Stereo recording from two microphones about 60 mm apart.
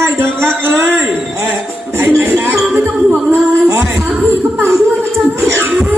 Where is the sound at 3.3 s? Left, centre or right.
Right.